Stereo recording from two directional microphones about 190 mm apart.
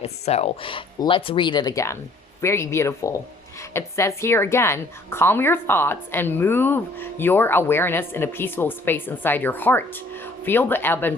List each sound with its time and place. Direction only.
0.0 s a woman's voice: 35° left (ahead or behind); by 11.1 s 10° left (ahead or behind)